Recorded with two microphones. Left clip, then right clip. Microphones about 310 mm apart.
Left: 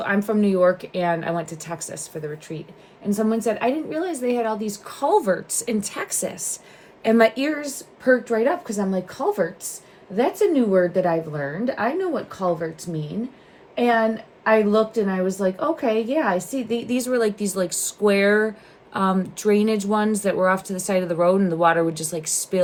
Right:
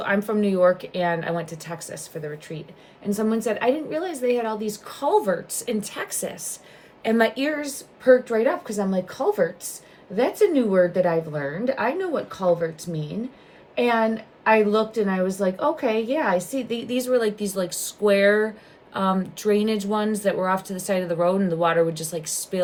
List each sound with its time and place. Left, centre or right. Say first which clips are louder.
0.0 s a woman's voice: left 1 dB; centre